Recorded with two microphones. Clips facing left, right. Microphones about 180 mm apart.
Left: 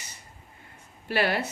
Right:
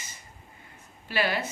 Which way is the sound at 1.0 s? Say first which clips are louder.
Left 2 dB; 60° left (ahead or behind).